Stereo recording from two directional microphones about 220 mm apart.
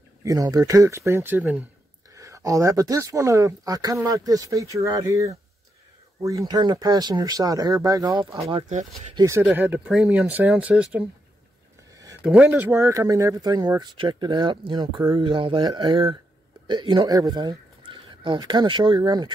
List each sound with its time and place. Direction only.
0.2 s speech: 15° right (ahead or behind)
8.5 s speech: 30° right (ahead or behind)
9.1 s speech: 15° right (ahead or behind)